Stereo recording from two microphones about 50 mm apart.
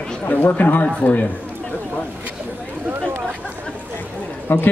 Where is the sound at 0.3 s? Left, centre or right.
Left.